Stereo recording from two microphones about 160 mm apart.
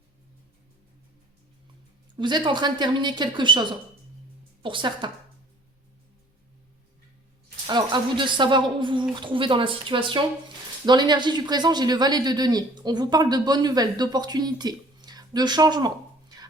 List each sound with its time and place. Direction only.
2.1 s speech: 30° right (ahead or behind)
7.7 s speech: 30° right (ahead or behind)